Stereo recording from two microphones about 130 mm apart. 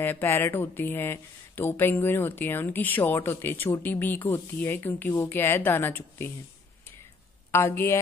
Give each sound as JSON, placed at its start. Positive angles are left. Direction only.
{"t": 0.0, "sound": "speech", "side_deg": 15}
{"t": 7.5, "sound": "speech", "side_deg": 20}